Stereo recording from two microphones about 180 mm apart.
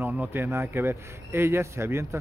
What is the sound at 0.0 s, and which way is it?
A man's voice, 10° right (ahead or behind).